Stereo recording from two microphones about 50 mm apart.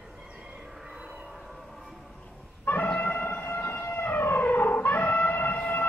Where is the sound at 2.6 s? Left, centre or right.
Left.